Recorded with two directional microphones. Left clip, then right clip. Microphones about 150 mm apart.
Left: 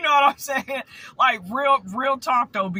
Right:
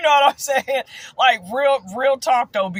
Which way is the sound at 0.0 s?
15° right (ahead or behind).